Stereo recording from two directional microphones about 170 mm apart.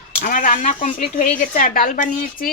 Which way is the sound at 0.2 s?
50° left (ahead or behind).